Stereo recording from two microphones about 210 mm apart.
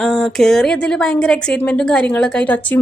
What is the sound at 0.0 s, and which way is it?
A woman's voice, centre (ahead or behind).